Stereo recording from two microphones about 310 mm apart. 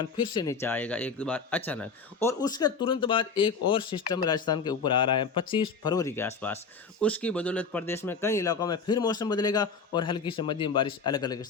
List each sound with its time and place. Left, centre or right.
0.3 s speech: centre